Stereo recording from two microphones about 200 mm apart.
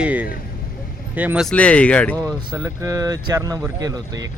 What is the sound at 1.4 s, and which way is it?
Speech, 5° left (ahead or behind).